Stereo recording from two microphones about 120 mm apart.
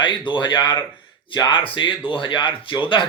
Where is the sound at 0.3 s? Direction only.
40° left (ahead or behind).